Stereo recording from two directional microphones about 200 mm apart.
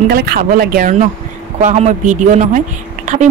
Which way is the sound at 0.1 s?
50° right (ahead or behind).